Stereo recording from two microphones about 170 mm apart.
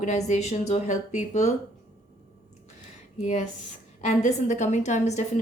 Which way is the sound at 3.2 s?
45° left (ahead or behind).